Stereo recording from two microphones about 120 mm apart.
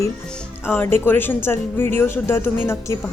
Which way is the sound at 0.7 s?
20° left (ahead or behind).